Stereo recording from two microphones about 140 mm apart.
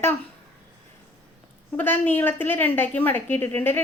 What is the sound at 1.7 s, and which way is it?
A woman's voice, 15° left (ahead or behind).